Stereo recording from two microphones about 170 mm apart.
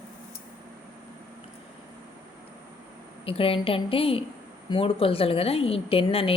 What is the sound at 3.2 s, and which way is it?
A woman's voice, 35° left (ahead or behind).